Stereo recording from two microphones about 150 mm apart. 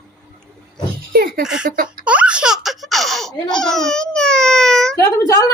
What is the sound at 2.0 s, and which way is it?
Baby laughter, 10° right (ahead or behind).